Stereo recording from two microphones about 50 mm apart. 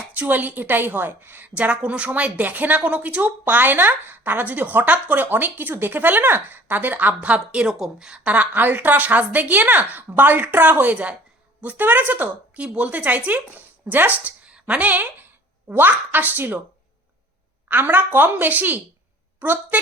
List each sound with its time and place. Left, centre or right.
0.2 s speech: right
1.5 s a woman's voice: right
7.7 s speech: centre
8.2 s speech: right
10.9 s a woman's voice: right
11.6 s speech: right
12.5 s speech: right
14.4 s a sound: right
15.7 s speech: right
17.7 s speech: right